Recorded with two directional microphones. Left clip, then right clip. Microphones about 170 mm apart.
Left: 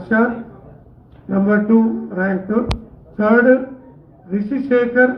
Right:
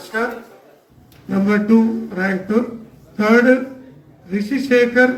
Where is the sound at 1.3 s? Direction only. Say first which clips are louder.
Left 1 dB; 40° right (ahead or behind).